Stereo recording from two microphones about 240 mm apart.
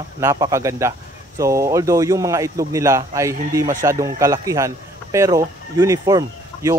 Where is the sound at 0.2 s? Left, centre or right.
Centre.